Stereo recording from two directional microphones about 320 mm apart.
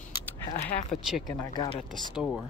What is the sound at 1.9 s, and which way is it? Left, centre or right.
Speech, centre.